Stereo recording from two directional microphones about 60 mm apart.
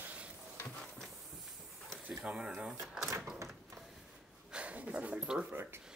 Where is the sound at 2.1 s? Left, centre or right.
Centre.